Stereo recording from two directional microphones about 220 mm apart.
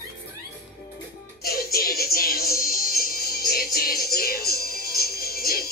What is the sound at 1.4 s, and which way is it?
Music, 45° left (ahead or behind).